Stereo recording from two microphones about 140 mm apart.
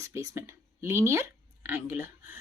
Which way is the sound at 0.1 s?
20° right (ahead or behind).